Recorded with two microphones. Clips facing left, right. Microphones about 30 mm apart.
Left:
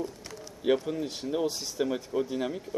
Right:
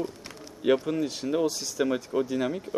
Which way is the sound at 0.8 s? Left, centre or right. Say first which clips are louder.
Right 4 dB; right.